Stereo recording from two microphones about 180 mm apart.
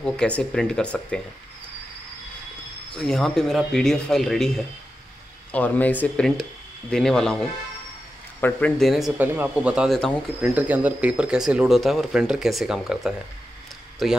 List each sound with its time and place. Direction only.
0.0 s speech: 5° left (ahead or behind)
2.9 s speech: 5° left (ahead or behind)
10.5 s speech: 10° right (ahead or behind)